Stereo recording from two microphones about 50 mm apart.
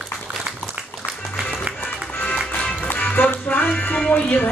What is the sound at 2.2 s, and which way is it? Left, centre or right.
Music, left.